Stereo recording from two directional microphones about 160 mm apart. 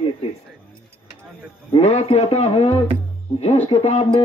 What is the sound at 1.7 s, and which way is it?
A man's voice, 45° left (ahead or behind).